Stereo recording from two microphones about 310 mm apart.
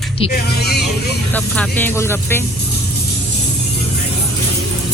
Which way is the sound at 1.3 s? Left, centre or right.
Centre.